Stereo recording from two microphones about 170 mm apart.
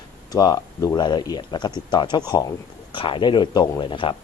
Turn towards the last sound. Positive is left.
turn(degrees=30)  # may be behind; listen again after turning